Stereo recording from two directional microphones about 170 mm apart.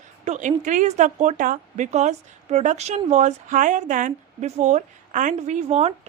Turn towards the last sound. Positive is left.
turn(degrees=-40)  # may be behind; listen again after turning